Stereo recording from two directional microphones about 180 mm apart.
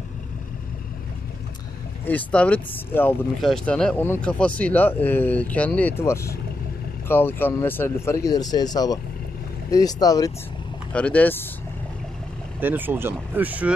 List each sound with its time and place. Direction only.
2.0 s speech: 10° left (ahead or behind)
10.9 s speech: 5° left (ahead or behind)
12.5 s speech: 10° right (ahead or behind)